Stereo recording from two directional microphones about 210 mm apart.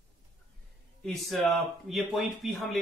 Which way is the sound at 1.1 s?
Centre (ahead or behind).